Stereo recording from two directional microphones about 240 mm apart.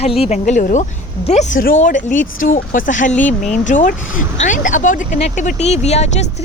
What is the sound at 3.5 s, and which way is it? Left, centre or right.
Speech, left.